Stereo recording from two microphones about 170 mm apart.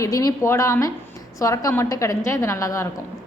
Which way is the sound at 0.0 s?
20° left (ahead or behind).